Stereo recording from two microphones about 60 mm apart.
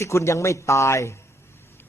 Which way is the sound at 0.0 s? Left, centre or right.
Left.